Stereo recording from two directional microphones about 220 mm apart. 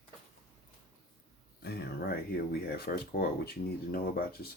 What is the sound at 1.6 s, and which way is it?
Speech, 45° left (ahead or behind).